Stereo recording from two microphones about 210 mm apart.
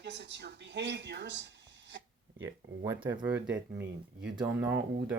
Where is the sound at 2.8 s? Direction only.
10° right (ahead or behind).